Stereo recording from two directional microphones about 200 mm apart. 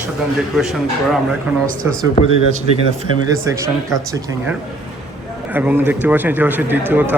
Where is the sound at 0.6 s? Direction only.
Centre (ahead or behind).